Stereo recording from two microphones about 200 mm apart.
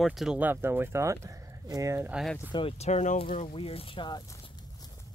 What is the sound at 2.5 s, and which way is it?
Speech, 30° left (ahead or behind).